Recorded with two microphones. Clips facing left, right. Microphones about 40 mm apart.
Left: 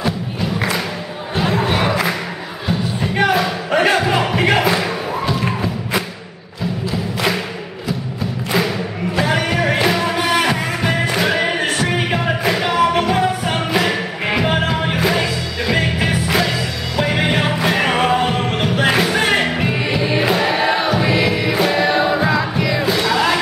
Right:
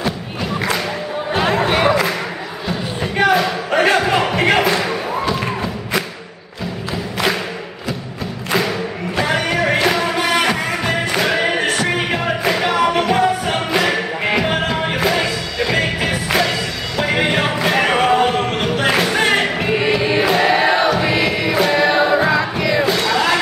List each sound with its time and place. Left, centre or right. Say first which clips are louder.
1.3 s music: right 2 dB; right
3.0 s music: right 2 dB; centre
9.1 s music: even; centre